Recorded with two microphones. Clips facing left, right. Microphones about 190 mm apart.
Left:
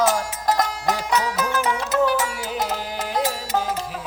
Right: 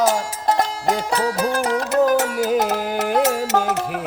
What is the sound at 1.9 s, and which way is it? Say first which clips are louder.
Music: right 5 dB; 55° right (ahead or behind).